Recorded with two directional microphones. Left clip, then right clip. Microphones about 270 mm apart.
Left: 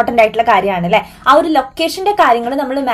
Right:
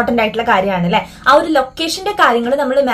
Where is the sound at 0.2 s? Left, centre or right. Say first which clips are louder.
Left 6 dB; left.